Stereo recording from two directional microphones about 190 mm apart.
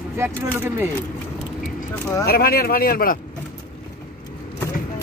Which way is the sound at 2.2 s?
50° left (ahead or behind).